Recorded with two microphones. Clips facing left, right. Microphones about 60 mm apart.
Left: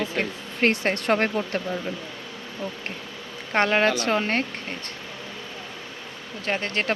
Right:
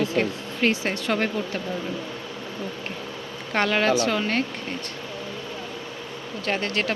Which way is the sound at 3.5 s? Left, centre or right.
Left.